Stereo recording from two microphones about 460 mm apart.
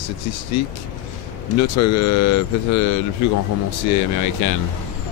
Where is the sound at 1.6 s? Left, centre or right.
Left.